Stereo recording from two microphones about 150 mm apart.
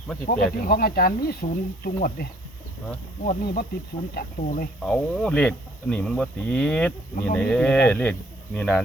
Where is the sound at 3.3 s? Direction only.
90° left.